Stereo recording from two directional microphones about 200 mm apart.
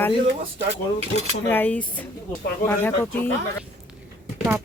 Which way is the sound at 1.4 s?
10° left (ahead or behind).